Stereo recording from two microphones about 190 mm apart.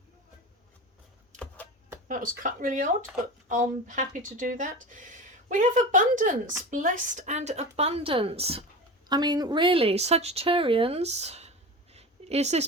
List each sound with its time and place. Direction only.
2.0 s speech: 45° right (ahead or behind)